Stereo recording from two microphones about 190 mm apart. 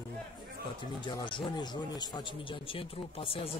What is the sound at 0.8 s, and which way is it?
Speech, 25° left (ahead or behind).